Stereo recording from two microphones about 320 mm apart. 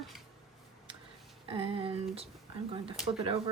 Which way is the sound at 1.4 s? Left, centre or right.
Centre.